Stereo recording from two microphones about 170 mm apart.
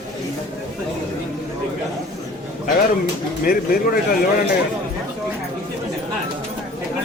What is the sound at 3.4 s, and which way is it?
Speech, 60° left (ahead or behind).